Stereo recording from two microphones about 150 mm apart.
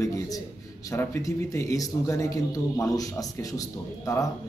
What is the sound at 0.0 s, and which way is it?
A man's voice, 20° left (ahead or behind).